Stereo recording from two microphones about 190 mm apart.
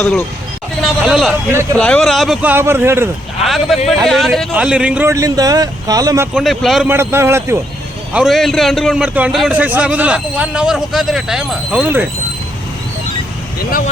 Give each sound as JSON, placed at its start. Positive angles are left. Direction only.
{"t": 0.0, "sound": "speech", "side_deg": 10}
{"t": 0.8, "sound": "a man's voice", "side_deg": 0}
{"t": 3.4, "sound": "a man's voice", "side_deg": 0}
{"t": 6.3, "sound": "a man's voice", "side_deg": 0}
{"t": 6.8, "sound": "a man's voice", "side_deg": -10}
{"t": 8.1, "sound": "a man's voice", "side_deg": 0}
{"t": 13.6, "sound": "speech", "side_deg": 50}